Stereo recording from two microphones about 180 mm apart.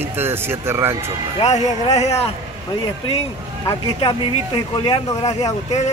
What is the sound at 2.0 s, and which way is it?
Speech, 35° left (ahead or behind).